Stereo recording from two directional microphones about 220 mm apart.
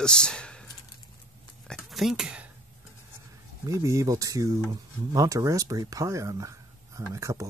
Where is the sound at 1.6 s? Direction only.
Centre (ahead or behind).